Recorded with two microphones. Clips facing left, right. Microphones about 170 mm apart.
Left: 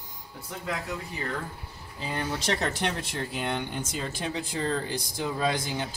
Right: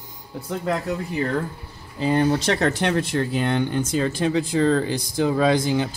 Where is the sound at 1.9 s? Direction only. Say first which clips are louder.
Right 12 dB; 70° right (ahead or behind).